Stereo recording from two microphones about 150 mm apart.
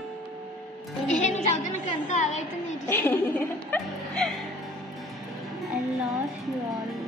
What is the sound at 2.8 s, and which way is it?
Speech, 15° left (ahead or behind).